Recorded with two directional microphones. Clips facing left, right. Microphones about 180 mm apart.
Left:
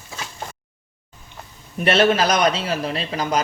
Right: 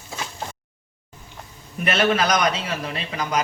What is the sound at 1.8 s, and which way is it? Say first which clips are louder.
A man's voice: left 4 dB; 30° left (ahead or behind).